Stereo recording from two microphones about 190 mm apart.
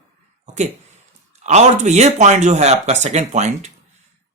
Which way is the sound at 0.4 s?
40° right (ahead or behind).